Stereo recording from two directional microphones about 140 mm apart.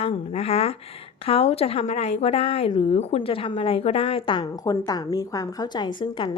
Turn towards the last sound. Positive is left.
turn(degrees=35)  # may be behind; listen again after turning